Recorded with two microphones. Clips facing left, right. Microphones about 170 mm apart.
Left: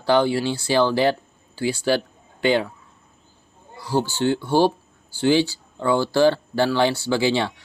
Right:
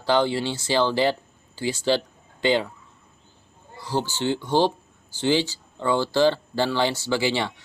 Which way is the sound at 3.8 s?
15° left (ahead or behind).